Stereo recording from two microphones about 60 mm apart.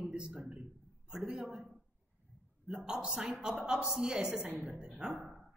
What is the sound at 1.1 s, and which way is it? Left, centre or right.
Speech, centre.